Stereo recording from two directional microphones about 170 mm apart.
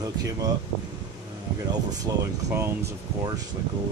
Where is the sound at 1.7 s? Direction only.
15° right (ahead or behind).